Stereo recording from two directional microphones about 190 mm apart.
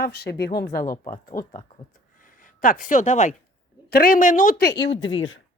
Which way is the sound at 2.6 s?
45° left (ahead or behind).